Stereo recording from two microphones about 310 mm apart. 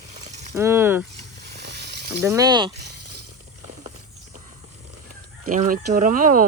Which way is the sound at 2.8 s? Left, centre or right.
Right.